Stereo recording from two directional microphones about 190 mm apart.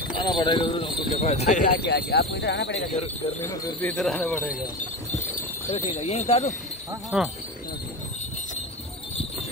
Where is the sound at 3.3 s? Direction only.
10° left (ahead or behind).